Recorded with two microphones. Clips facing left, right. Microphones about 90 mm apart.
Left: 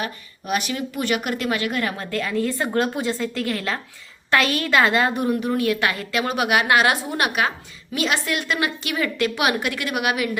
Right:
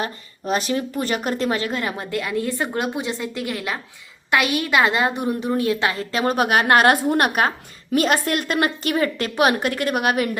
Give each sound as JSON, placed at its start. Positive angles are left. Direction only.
{"t": 0.0, "sound": "a woman's voice", "side_deg": -30}